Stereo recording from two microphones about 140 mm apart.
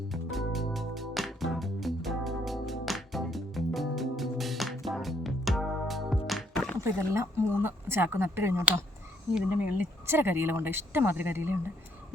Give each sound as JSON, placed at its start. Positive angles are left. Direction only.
{"t": 0.1, "sound": "music", "side_deg": 0}
{"t": 6.8, "sound": "speech", "side_deg": -20}